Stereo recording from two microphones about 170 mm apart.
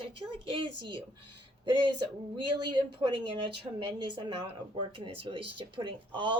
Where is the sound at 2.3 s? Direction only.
25° right (ahead or behind).